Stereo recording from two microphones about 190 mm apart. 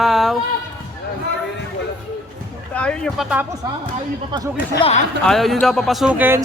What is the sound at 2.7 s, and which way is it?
Speech, 5° left (ahead or behind).